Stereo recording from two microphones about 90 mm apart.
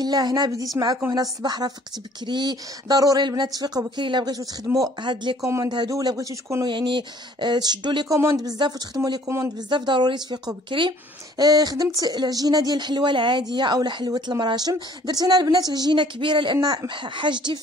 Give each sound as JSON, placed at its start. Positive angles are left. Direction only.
{"t": 0.0, "sound": "a woman's voice", "side_deg": -50}
{"t": 0.8, "sound": "speech", "side_deg": -25}
{"t": 1.1, "sound": "a woman's voice", "side_deg": -50}
{"t": 4.7, "sound": "speech", "side_deg": -20}
{"t": 5.0, "sound": "speech", "side_deg": -60}
{"t": 5.4, "sound": "speech", "side_deg": -35}
{"t": 6.6, "sound": "speech", "side_deg": -60}
{"t": 8.1, "sound": "a woman's voice", "side_deg": -35}
{"t": 9.7, "sound": "speech", "side_deg": -55}
{"t": 11.3, "sound": "a woman's voice", "side_deg": -45}
{"t": 16.6, "sound": "speech", "side_deg": -50}